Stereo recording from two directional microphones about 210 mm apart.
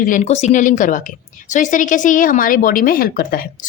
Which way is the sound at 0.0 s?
35° left (ahead or behind).